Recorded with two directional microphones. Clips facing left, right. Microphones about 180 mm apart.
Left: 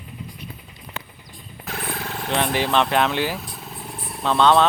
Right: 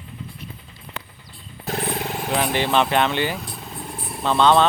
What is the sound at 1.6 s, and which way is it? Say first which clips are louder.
Vehicle: right 6 dB; 30° right (ahead or behind).